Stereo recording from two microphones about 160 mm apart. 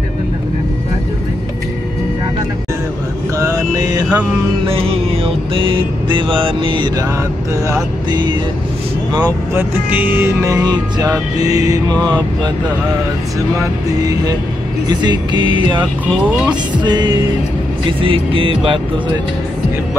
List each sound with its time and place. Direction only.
3.3 s mantra: 20° right (ahead or behind)
4.6 s music: 35° right (ahead or behind)
9.6 s speech: 10° right (ahead or behind)
10.1 s music: 15° right (ahead or behind)
13.6 s music: 20° right (ahead or behind)
16.3 s speech: 5° right (ahead or behind)
16.7 s music: 30° right (ahead or behind)